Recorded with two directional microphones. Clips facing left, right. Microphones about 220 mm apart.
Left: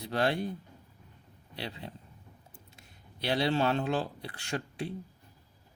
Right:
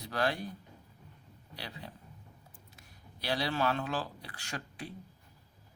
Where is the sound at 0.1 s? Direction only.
25° left (ahead or behind).